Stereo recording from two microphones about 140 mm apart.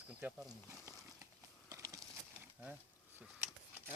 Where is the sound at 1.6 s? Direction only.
25° right (ahead or behind).